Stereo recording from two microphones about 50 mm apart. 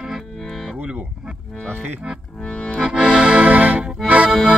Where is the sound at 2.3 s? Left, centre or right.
Centre.